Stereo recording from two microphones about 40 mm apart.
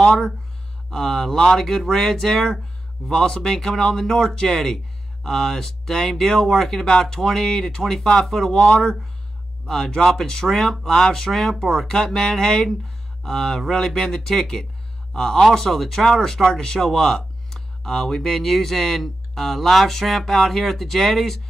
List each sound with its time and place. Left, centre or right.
0.0 s speech: centre